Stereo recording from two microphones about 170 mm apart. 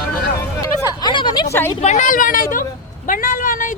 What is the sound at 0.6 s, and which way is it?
Speech, 25° left (ahead or behind).